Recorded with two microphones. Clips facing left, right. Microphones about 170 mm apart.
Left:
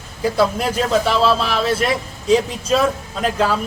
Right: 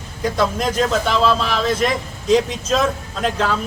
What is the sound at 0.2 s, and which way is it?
A man's voice, 5° left (ahead or behind).